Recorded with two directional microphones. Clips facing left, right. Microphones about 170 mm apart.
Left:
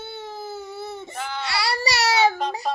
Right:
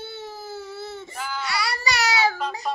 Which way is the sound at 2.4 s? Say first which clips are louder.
Left 2 dB; 35° left (ahead or behind).